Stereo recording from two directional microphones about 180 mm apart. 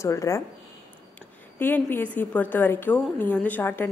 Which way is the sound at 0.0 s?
15° left (ahead or behind).